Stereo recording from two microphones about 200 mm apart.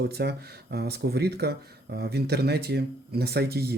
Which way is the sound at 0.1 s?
55° right (ahead or behind).